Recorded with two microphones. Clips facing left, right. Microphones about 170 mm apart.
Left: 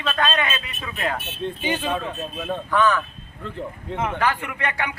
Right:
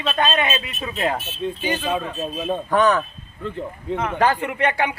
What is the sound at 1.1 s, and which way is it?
Speech, 60° left (ahead or behind).